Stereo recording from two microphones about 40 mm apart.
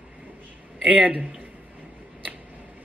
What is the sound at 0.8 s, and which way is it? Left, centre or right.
Speech, right.